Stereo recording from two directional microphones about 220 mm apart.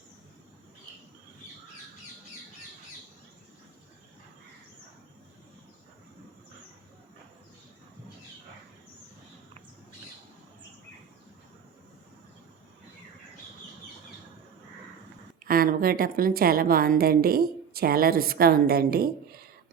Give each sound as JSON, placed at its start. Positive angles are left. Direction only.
{"t": 15.4, "sound": "a woman's voice", "side_deg": -40}